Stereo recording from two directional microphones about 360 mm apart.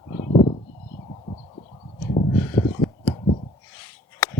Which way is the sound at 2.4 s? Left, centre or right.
Centre.